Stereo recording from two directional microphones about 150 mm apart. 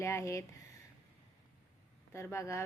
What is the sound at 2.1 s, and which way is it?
Speech, 20° left (ahead or behind).